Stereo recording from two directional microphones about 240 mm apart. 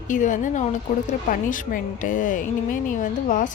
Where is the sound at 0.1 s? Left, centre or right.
Left.